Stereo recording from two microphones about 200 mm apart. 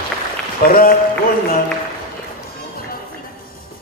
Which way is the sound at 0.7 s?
45° left (ahead or behind).